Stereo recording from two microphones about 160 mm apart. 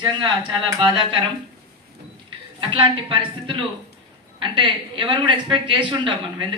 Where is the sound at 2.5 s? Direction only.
30° right (ahead or behind).